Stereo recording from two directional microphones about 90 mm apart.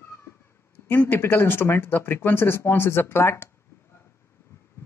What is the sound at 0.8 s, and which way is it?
Speech, 20° left (ahead or behind).